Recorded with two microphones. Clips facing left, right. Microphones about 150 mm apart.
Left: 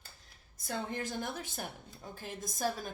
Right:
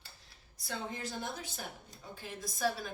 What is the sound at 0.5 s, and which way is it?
A woman's voice, 45° left (ahead or behind).